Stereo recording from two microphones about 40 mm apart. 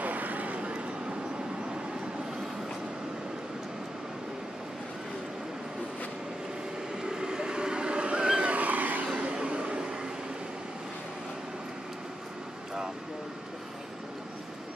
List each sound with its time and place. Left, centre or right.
0.0 s vehicle: right
7.0 s vehicle: centre
8.5 s vehicle: right
9.0 s a sound: right